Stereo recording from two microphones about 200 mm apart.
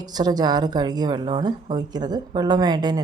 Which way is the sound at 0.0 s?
20° right (ahead or behind).